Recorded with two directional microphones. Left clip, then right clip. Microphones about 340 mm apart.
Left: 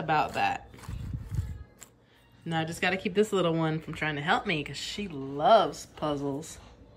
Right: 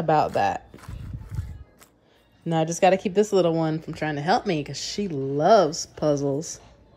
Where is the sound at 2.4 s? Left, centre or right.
Centre.